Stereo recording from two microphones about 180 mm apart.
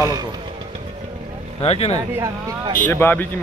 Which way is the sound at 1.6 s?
35° left (ahead or behind).